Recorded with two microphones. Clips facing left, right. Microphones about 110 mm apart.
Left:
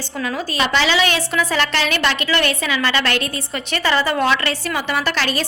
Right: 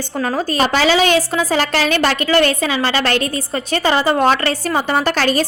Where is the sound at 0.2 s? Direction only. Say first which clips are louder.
Right 4 dB; 40° right (ahead or behind).